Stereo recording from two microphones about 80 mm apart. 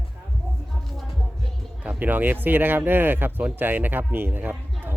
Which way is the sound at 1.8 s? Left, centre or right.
Right.